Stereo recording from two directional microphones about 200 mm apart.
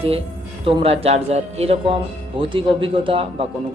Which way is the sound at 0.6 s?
25° right (ahead or behind).